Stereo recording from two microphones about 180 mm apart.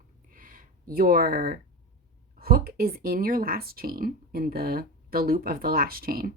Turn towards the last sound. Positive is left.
turn(degrees=-55)  # may be behind; listen again after turning